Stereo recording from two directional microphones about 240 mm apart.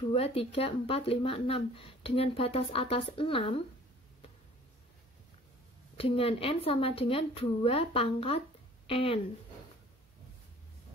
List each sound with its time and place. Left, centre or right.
0.0 s speech: left
5.9 s a woman's voice: left